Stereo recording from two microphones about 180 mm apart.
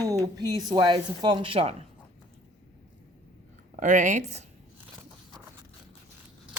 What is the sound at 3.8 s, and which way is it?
Speech, 45° right (ahead or behind).